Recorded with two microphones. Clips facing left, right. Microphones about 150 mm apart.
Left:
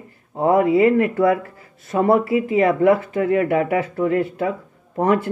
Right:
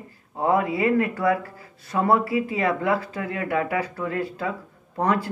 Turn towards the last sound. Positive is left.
turn(degrees=20)  # may be behind; listen again after turning